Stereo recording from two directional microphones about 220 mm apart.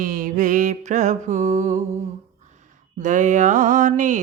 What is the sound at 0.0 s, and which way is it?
Mantra, 35° right (ahead or behind).